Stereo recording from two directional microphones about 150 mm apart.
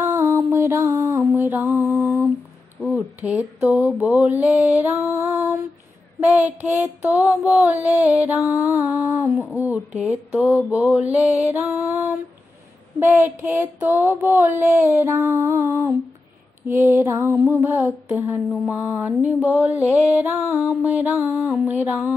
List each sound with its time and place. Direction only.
0.0 s mantra: 20° right (ahead or behind)
1.3 s mantra: 15° right (ahead or behind)
2.8 s speech: 10° right (ahead or behind)
3.6 s music: 10° right (ahead or behind)
11.9 s humming: 20° right (ahead or behind)
13.0 s music: 15° right (ahead or behind)